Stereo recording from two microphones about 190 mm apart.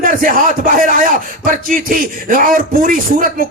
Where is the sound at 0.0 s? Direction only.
45° right (ahead or behind).